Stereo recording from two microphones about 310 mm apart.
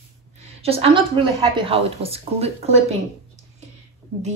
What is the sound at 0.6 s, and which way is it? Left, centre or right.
A woman's voice, centre.